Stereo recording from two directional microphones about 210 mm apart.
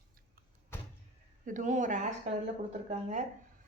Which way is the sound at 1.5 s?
40° right (ahead or behind).